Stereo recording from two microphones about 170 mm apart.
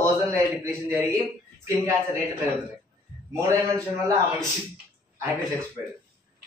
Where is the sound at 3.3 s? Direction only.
20° right (ahead or behind).